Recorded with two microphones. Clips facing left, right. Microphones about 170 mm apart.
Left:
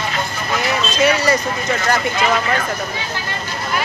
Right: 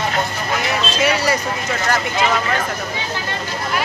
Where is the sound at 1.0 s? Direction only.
10° right (ahead or behind).